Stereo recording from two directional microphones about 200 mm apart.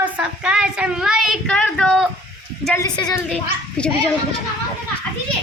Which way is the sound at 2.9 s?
20° left (ahead or behind).